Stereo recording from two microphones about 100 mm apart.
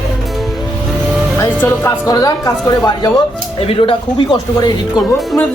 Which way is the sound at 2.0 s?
35° left (ahead or behind).